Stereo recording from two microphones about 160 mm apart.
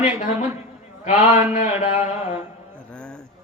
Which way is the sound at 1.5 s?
45° left (ahead or behind).